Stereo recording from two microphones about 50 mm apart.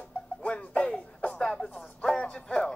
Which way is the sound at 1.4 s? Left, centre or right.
Centre.